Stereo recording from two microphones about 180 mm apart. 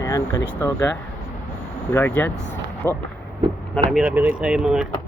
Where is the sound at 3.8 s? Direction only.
Centre (ahead or behind).